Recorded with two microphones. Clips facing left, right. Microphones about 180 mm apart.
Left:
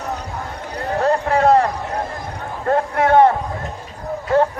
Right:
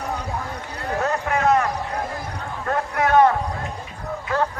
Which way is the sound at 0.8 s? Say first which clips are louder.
Left 6 dB; 35° left (ahead or behind).